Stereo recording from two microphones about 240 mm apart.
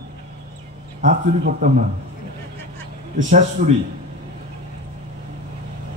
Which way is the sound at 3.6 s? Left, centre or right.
Right.